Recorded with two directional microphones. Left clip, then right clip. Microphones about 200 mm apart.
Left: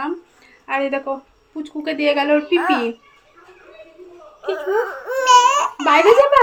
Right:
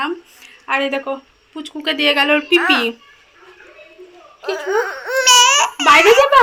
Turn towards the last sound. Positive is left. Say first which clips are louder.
# right 2 dB
turn(degrees=0)  # may be behind; listen again after turning